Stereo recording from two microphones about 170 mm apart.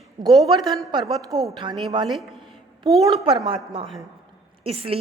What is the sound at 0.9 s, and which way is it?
Speech, 25° right (ahead or behind).